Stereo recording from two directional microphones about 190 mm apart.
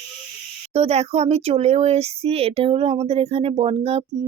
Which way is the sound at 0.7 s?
35° right (ahead or behind).